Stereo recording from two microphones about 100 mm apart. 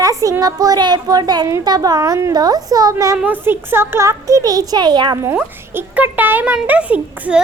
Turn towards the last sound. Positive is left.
turn(degrees=-15)  # may be behind; listen again after turning